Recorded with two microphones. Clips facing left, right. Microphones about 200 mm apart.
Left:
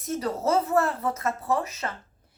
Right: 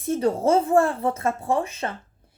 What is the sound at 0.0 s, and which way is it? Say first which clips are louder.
A woman's voice: right 6 dB; 30° right (ahead or behind).